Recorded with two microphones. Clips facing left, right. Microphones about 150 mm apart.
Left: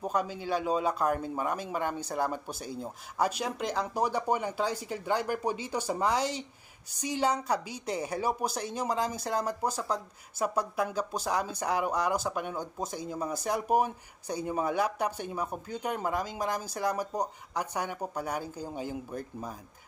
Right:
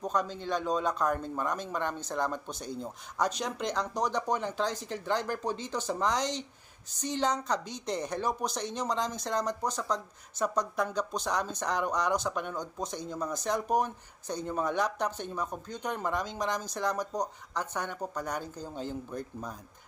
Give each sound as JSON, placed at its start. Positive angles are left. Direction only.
{"t": 0.0, "sound": "speech", "side_deg": 10}